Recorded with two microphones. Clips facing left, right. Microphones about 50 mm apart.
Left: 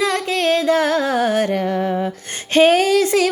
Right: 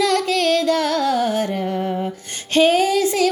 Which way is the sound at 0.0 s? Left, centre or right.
Left.